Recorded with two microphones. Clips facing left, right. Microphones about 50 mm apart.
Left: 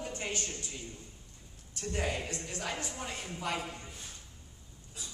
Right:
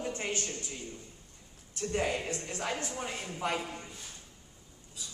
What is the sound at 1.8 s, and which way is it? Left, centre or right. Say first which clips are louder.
Speech: right 3 dB; right.